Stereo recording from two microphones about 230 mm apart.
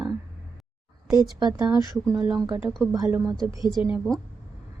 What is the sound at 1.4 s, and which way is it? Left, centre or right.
Speech, centre.